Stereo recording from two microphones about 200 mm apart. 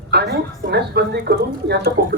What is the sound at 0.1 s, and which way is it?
Speech, 55° right (ahead or behind).